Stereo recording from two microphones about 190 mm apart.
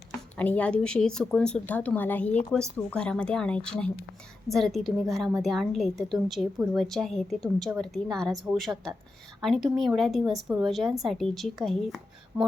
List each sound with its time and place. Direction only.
0.3 s a woman's voice: 10° left (ahead or behind)
12.3 s speech: 15° right (ahead or behind)